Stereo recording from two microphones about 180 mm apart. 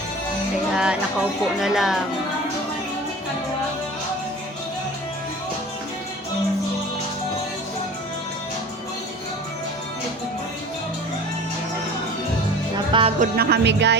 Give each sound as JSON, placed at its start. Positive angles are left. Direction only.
{"t": 0.7, "sound": "speech", "side_deg": -5}
{"t": 12.7, "sound": "music", "side_deg": -30}
{"t": 13.1, "sound": "music", "side_deg": -60}